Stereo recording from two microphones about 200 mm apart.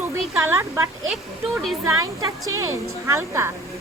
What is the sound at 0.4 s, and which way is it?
Speech, 10° right (ahead or behind).